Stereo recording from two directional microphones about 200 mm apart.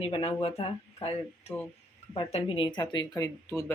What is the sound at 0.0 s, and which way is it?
Speech, 30° left (ahead or behind).